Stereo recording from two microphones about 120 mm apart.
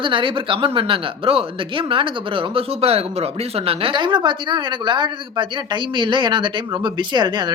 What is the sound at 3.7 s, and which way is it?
Speech, 45° right (ahead or behind).